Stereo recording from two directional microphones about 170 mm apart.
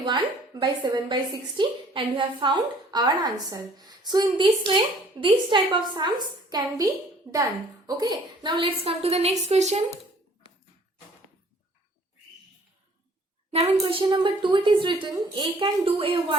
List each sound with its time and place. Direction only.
0.0 s a woman's voice: 25° right (ahead or behind); by 10.0 s 40° right (ahead or behind)
13.5 s a woman's voice: 35° right (ahead or behind)